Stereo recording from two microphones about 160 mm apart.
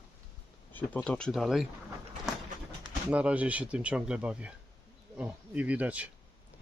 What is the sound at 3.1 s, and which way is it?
Speech, 10° right (ahead or behind).